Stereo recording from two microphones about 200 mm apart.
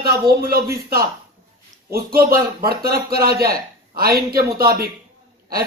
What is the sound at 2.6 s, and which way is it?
Speech, 50° right (ahead or behind).